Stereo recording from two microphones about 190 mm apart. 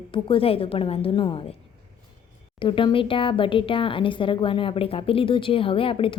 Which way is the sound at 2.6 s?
25° left (ahead or behind).